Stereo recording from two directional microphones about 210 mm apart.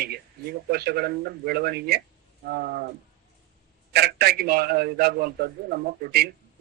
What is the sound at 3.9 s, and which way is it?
A man's voice, 50° right (ahead or behind).